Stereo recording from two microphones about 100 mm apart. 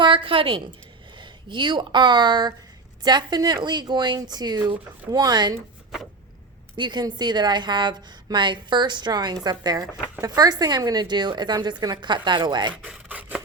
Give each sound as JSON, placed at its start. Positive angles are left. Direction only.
{"t": 0.0, "sound": "a woman's voice", "side_deg": -60}
{"t": 6.7, "sound": "a woman's voice", "side_deg": -50}
{"t": 12.7, "sound": "rub", "side_deg": -15}